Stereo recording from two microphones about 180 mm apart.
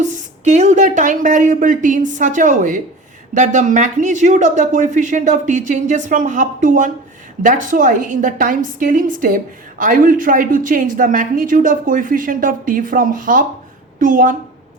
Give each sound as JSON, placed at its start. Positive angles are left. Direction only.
{"t": 0.0, "sound": "a woman's voice", "side_deg": -40}